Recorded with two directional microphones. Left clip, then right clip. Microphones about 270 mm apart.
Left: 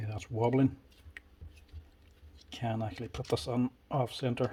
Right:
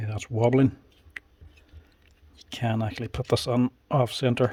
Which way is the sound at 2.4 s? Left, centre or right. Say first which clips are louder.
Right 7 dB; right.